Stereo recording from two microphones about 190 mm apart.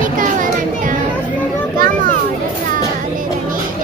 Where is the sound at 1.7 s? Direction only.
50° right (ahead or behind).